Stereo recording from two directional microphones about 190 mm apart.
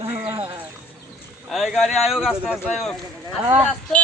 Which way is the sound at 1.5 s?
Centre (ahead or behind).